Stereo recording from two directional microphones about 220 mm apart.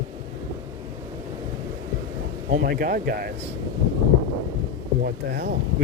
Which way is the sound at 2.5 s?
45° right (ahead or behind).